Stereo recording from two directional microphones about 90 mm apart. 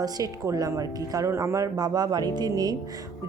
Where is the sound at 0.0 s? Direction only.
45° right (ahead or behind).